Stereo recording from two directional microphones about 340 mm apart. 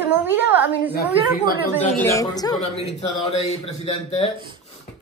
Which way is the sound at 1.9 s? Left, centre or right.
Centre.